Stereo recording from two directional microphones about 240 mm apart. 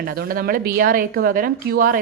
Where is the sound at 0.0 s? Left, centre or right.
Right.